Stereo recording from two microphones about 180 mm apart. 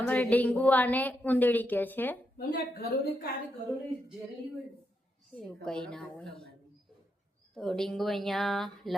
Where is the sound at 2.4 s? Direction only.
55° left (ahead or behind).